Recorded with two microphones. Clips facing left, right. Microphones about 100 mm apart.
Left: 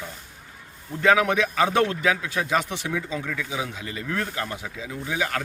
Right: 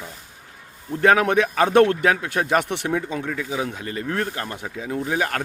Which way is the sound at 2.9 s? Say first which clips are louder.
Right 4 dB; 45° right (ahead or behind).